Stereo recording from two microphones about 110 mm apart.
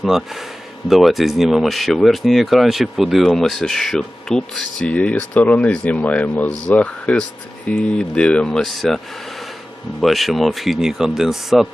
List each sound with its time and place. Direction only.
0.0 s speech: centre (ahead or behind)
10.0 s speech: centre (ahead or behind)